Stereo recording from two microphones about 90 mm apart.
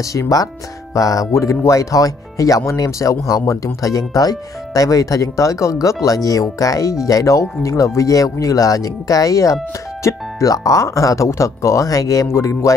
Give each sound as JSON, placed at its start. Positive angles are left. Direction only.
{"t": 0.0, "sound": "speech", "side_deg": 40}